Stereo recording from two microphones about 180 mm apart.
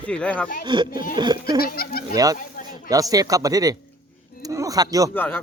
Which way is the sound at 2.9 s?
20° right (ahead or behind).